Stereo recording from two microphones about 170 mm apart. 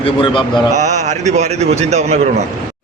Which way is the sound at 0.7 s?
45° right (ahead or behind).